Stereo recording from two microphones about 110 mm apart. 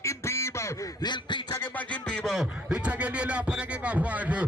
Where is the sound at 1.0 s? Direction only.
45° left (ahead or behind).